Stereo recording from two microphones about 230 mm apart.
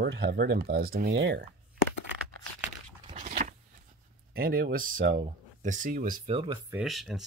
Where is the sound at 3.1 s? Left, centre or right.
Right.